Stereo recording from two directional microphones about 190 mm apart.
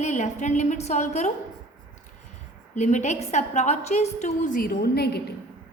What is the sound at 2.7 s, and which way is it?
A woman's voice, 35° left (ahead or behind).